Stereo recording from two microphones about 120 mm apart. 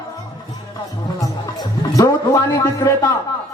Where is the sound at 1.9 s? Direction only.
35° left (ahead or behind).